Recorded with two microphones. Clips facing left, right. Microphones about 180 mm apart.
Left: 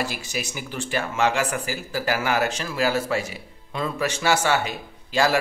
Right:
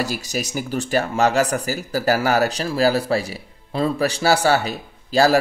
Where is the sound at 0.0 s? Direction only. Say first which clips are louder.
Right 4 dB; 40° right (ahead or behind).